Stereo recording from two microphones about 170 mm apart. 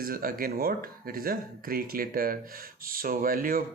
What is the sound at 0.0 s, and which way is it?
Speech, 60° right (ahead or behind).